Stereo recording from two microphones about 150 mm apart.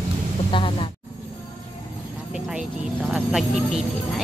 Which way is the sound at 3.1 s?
5° right (ahead or behind).